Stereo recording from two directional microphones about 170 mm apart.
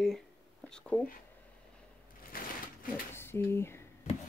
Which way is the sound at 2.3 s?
55° left (ahead or behind).